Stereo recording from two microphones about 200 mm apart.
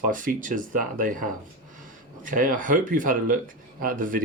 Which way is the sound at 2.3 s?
40° right (ahead or behind).